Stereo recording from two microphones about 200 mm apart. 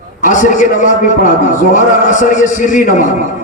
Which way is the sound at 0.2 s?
40° left (ahead or behind).